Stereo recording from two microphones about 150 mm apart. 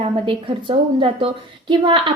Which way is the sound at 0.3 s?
35° right (ahead or behind).